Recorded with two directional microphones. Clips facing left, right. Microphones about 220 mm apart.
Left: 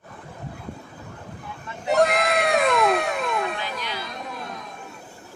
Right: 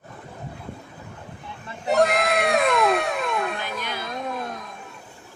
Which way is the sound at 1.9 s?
Centre (ahead or behind).